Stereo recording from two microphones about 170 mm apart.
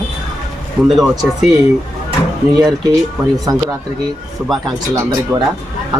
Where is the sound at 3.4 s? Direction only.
20° right (ahead or behind).